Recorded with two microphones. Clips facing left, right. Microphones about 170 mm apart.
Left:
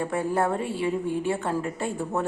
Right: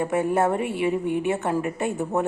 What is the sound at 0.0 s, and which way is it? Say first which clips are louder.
A woman's voice: right 3 dB; 20° right (ahead or behind).